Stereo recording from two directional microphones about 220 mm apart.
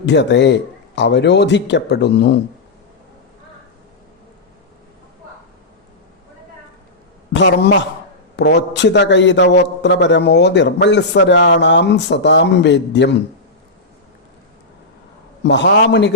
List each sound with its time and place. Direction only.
0.0 s a man's voice: 50° left (ahead or behind)
7.3 s a man's voice: 55° left (ahead or behind)
15.4 s a man's voice: 55° left (ahead or behind)